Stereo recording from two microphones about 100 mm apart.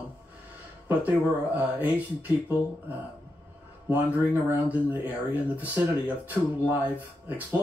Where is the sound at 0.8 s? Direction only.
15° right (ahead or behind).